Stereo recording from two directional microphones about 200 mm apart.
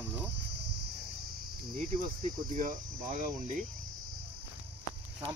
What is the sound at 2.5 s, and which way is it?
Speech, 40° right (ahead or behind).